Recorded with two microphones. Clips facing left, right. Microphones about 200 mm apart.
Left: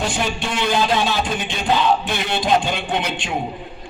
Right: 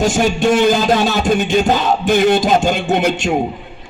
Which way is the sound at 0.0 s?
45° right (ahead or behind).